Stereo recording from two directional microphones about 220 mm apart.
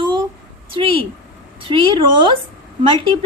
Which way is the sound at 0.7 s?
25° right (ahead or behind).